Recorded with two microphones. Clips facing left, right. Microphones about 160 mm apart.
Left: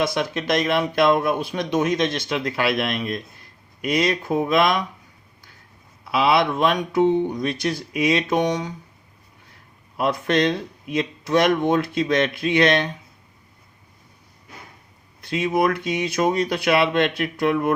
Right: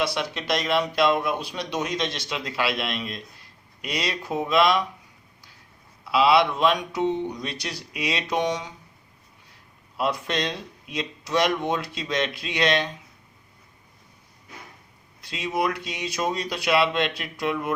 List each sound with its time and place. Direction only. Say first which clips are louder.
0.0 s speech: left 4 dB; 50° left (ahead or behind)
6.1 s speech: even; 50° left (ahead or behind)
10.0 s speech: left 6 dB; 55° left (ahead or behind)
15.2 s speech: left 6 dB; 55° left (ahead or behind)